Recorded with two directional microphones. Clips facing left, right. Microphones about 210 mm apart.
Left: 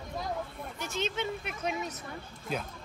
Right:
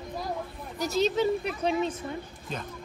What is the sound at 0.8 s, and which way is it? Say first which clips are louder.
Speech: right 9 dB; 40° right (ahead or behind).